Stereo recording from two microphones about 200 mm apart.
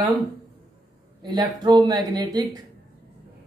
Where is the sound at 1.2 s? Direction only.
20° right (ahead or behind).